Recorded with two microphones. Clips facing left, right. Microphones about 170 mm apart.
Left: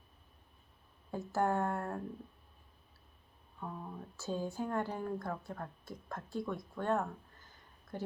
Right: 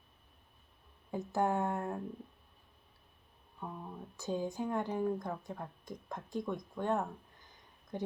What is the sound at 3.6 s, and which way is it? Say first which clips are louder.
Speech: even; 10° right (ahead or behind).